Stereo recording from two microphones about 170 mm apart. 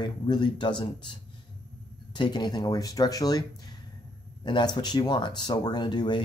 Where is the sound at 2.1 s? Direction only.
25° left (ahead or behind).